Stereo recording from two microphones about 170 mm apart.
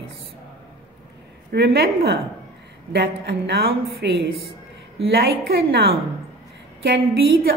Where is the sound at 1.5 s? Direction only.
70° right (ahead or behind).